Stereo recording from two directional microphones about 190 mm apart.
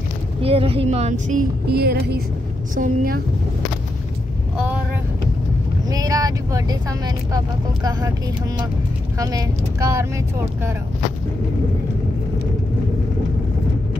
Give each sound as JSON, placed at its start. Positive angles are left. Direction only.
{"t": 0.4, "sound": "speech", "side_deg": -30}
{"t": 2.7, "sound": "a woman's voice", "side_deg": -45}
{"t": 5.9, "sound": "speech", "side_deg": -20}
{"t": 9.2, "sound": "speech", "side_deg": -20}